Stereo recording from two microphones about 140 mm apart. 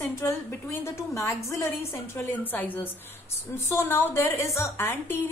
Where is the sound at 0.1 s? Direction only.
20° left (ahead or behind).